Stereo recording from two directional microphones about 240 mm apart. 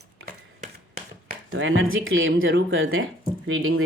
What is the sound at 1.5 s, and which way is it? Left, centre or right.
Speech, right.